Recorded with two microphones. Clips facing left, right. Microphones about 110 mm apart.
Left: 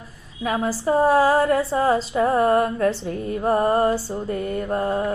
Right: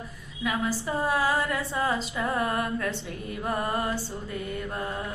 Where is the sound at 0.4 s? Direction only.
40° left (ahead or behind).